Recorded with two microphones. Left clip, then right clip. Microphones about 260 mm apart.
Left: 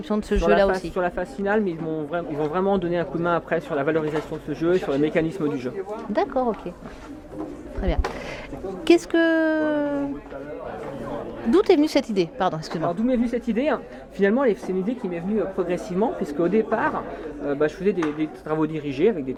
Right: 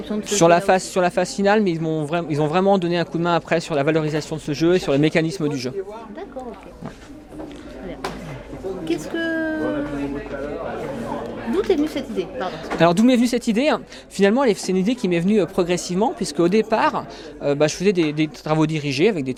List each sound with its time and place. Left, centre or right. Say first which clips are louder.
0.1 s speech: left 3 dB; left
0.4 s a man's voice: right 5 dB; right
9.1 s speech: left 4 dB; left
11.5 s a woman's voice: left 3 dB; left
12.9 s a man's voice: right 6 dB; right